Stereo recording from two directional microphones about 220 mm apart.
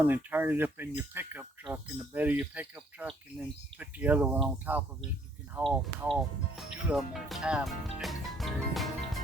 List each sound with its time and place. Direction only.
0.0 s speech: 10° right (ahead or behind)